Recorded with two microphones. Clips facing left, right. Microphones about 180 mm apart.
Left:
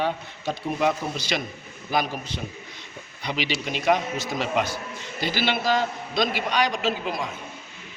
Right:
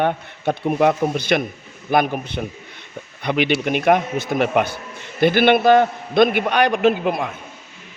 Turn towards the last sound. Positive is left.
turn(degrees=-55)  # may be behind; listen again after turning